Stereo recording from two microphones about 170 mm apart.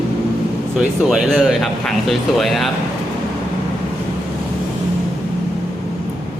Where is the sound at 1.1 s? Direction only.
Centre (ahead or behind).